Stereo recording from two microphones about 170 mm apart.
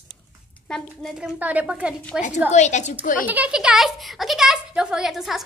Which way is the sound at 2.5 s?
45° left (ahead or behind).